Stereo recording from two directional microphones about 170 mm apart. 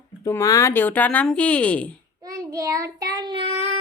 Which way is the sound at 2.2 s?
20° right (ahead or behind).